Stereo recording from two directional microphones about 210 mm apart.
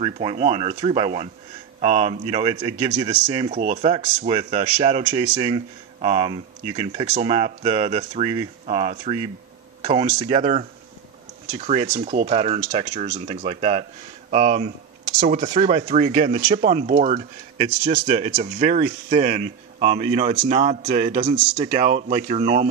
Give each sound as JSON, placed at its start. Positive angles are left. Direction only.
{"t": 0.0, "sound": "speech", "side_deg": -25}
{"t": 3.4, "sound": "speech", "side_deg": -35}
{"t": 9.8, "sound": "a sound", "side_deg": -25}
{"t": 10.2, "sound": "speech", "side_deg": -30}